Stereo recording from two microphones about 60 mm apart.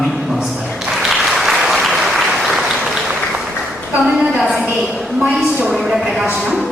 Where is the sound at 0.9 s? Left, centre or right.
Centre.